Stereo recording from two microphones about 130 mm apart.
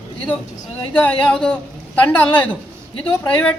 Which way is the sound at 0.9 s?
10° left (ahead or behind).